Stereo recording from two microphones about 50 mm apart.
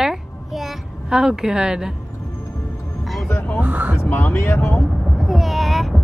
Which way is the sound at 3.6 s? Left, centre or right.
Right.